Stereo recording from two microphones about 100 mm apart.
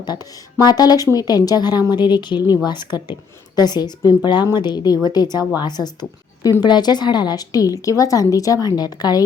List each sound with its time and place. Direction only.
0.0 s a woman's voice: 40° left (ahead or behind)